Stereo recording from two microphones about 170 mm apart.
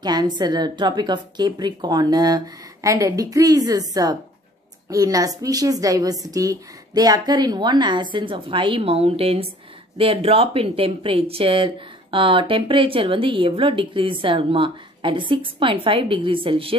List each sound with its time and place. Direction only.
0.0 s a woman's voice: 25° right (ahead or behind)